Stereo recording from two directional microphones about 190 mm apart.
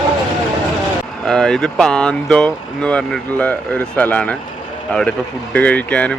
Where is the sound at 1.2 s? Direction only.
5° left (ahead or behind).